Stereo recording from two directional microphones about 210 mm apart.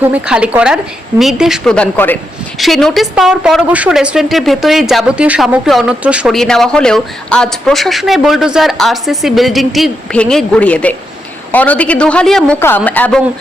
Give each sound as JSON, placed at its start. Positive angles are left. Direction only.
{"t": 0.0, "sound": "a woman's voice", "side_deg": -5}